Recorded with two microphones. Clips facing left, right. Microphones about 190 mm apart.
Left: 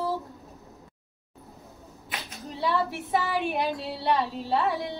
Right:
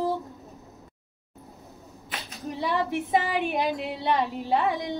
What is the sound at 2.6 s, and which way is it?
A woman's voice, 15° right (ahead or behind).